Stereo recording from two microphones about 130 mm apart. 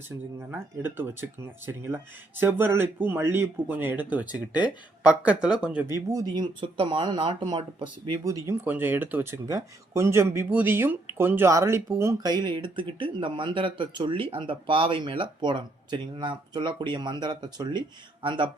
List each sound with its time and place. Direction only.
0.3 s speech: 15° right (ahead or behind)
5.9 s speech: 25° right (ahead or behind); by 18.5 s 40° right (ahead or behind)